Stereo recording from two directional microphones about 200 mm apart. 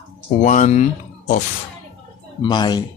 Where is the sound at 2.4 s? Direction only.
20° left (ahead or behind).